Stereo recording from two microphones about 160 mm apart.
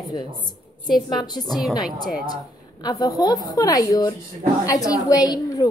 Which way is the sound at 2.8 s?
25° left (ahead or behind).